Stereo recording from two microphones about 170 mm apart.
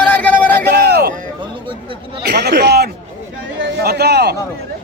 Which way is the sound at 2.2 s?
80° right.